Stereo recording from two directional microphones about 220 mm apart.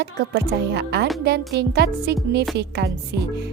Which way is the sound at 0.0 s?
50° right (ahead or behind).